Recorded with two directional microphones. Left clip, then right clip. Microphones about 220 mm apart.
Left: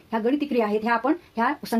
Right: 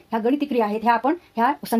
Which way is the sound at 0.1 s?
40° right (ahead or behind).